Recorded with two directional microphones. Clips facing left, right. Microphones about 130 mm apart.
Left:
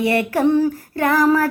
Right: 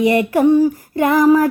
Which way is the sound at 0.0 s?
15° right (ahead or behind).